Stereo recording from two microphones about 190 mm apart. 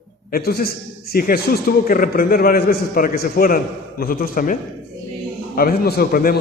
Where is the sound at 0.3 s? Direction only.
55° left (ahead or behind).